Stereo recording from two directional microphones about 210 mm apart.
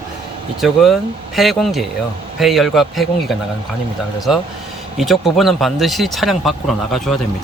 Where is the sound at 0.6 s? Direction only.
Centre (ahead or behind).